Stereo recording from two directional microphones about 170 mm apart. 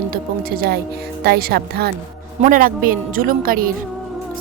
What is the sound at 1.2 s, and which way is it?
Speech, 65° right (ahead or behind).